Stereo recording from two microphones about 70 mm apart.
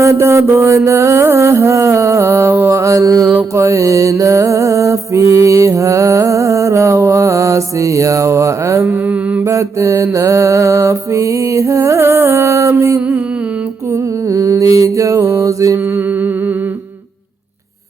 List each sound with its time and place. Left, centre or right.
0.0 s music: right
8.9 s mantra: right
9.4 s music: right
13.9 s mantra: right